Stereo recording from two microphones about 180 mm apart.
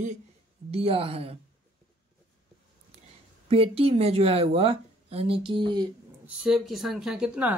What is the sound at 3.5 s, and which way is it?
Speech, 30° right (ahead or behind).